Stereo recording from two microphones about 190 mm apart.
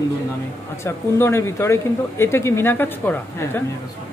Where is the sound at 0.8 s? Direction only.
15° left (ahead or behind).